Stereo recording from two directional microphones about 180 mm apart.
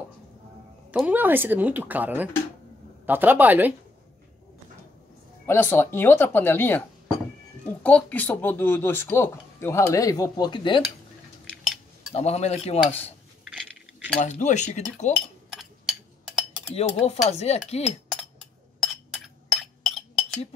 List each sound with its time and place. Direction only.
0.9 s speech: 10° right (ahead or behind)
5.5 s speech: 15° left (ahead or behind)
11.5 s cutlery: centre (ahead or behind)
12.1 s cutlery: 35° left (ahead or behind)
13.4 s coin: 5° right (ahead or behind)
14.1 s cutlery: 40° left (ahead or behind)
15.5 s a sound: centre (ahead or behind)
16.7 s cutlery: 35° left (ahead or behind)
18.8 s chink: centre (ahead or behind)